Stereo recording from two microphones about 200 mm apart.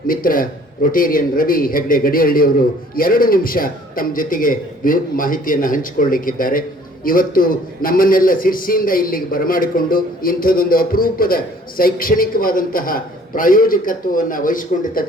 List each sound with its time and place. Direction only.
0.1 s a man's voice: 45° left (ahead or behind)